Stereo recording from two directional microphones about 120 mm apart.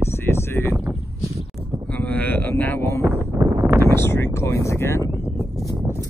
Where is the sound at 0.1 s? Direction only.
20° left (ahead or behind).